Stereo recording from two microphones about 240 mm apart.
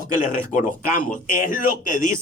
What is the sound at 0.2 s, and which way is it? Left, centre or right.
Speech, left.